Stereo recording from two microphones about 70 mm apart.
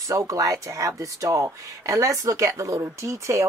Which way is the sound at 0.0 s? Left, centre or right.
Right.